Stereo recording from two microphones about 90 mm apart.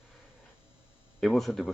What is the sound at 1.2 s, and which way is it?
Speech, centre (ahead or behind).